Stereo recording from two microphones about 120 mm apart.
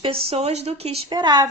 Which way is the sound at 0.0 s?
50° right (ahead or behind).